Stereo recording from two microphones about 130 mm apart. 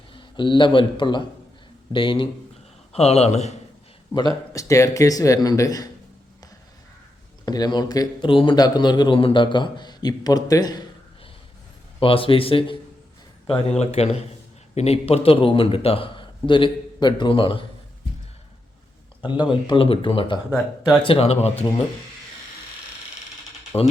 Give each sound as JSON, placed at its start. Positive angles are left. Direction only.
{"t": 0.1, "sound": "a man's voice", "side_deg": 40}
{"t": 2.9, "sound": "a man's voice", "side_deg": 55}
{"t": 4.5, "sound": "speech", "side_deg": 25}
{"t": 7.4, "sound": "a man's voice", "side_deg": 30}
{"t": 11.9, "sound": "a man's voice", "side_deg": 45}
{"t": 19.2, "sound": "a man's voice", "side_deg": 35}
{"t": 21.1, "sound": "a man's voice", "side_deg": 50}
{"t": 23.7, "sound": "speech", "side_deg": 15}